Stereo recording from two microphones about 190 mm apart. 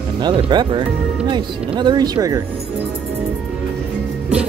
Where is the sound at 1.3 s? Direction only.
25° right (ahead or behind).